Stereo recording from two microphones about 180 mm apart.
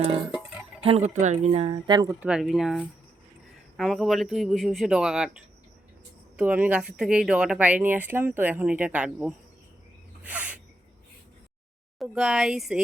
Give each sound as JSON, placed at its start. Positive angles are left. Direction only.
{"t": 0.8, "sound": "speech", "side_deg": -35}
{"t": 2.2, "sound": "speech", "side_deg": -5}
{"t": 10.2, "sound": "sneeze", "side_deg": -10}
{"t": 11.9, "sound": "speech", "side_deg": -5}